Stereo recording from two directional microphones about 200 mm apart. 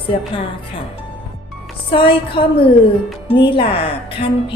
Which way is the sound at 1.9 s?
25° left (ahead or behind).